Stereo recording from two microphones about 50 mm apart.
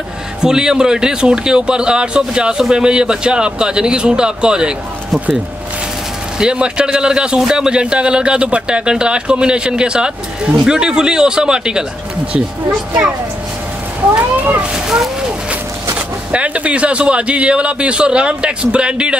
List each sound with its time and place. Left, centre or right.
0.4 s speech: centre
6.4 s a man's voice: centre
14.1 s speech: right
16.3 s a man's voice: right